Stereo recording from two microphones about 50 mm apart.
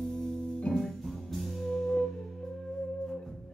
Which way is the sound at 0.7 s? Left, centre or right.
Left.